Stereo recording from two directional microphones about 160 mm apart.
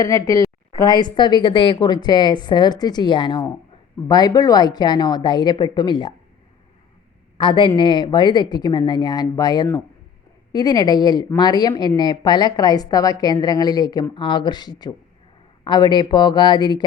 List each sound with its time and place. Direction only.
0.0 s speech: 20° left (ahead or behind)
7.3 s speech: 30° left (ahead or behind)